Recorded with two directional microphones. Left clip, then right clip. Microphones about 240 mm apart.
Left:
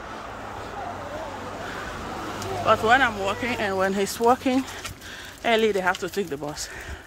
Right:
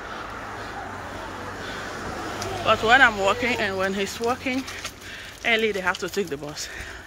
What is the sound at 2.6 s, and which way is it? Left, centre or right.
Speech, centre.